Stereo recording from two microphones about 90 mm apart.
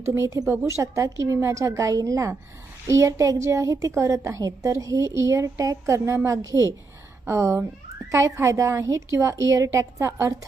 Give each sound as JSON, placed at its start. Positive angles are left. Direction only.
{"t": 0.0, "sound": "a woman's voice", "side_deg": -35}